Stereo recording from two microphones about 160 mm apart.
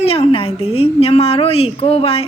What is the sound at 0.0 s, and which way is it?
A woman's voice, 40° left (ahead or behind).